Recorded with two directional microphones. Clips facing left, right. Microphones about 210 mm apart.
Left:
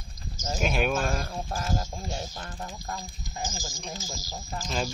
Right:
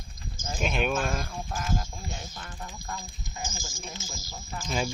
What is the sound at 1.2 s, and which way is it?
Speech, 40° left (ahead or behind).